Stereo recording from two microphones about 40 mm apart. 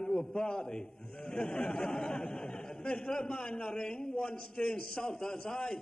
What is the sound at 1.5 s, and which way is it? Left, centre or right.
A man's voice, centre.